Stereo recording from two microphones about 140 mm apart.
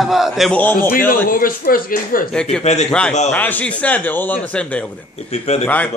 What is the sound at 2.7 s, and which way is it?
Speech, 50° left (ahead or behind).